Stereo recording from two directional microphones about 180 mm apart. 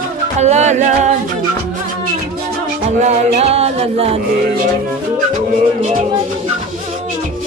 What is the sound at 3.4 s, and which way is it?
Music, 35° right (ahead or behind).